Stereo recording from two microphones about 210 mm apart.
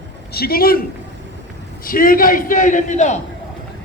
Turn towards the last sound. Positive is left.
turn(degrees=35)  # may be behind; listen again after turning